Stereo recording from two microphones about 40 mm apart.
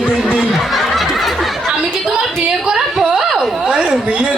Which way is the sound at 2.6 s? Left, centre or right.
Centre.